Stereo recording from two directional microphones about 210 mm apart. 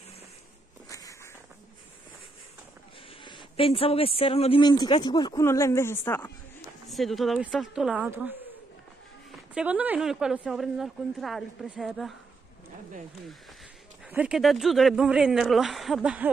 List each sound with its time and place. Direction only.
0.8 s walk: 15° left (ahead or behind)
3.3 s speech: 25° left (ahead or behind)
6.9 s a woman's voice: centre (ahead or behind)
9.5 s a woman's voice: 5° right (ahead or behind)
14.0 s a woman's voice: 5° right (ahead or behind)